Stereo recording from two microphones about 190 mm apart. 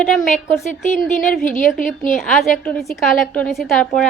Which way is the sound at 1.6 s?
45° left (ahead or behind).